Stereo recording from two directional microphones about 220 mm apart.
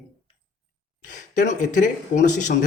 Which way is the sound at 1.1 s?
35° left (ahead or behind).